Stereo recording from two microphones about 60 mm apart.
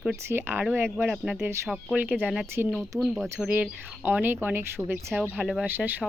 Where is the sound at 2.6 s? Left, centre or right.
Right.